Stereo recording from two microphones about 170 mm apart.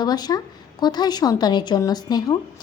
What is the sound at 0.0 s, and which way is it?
Speech, 25° left (ahead or behind).